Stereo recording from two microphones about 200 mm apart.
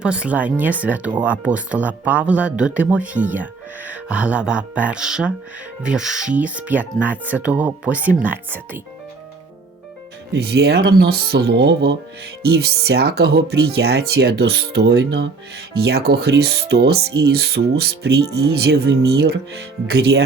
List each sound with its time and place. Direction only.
0.0 s speech: 5° right (ahead or behind)
10.3 s speech: 55° right (ahead or behind)